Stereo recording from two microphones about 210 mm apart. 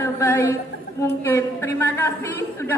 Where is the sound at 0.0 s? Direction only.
10° left (ahead or behind).